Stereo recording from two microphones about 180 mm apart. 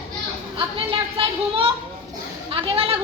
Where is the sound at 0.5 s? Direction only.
30° right (ahead or behind).